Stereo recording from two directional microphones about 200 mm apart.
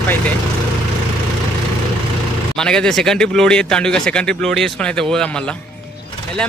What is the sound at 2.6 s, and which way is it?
A man's voice, 5° left (ahead or behind).